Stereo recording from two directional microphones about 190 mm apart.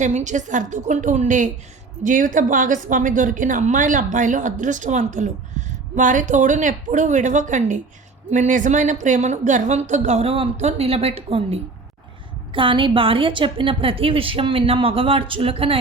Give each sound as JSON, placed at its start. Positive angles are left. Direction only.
{"t": 0.0, "sound": "a woman's voice", "side_deg": -40}